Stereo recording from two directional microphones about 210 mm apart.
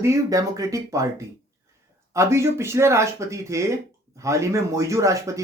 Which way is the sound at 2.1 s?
15° right (ahead or behind).